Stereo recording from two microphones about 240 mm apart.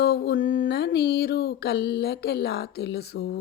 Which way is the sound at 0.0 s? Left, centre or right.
Left.